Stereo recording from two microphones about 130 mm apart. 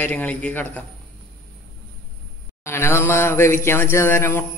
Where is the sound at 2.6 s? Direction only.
20° left (ahead or behind).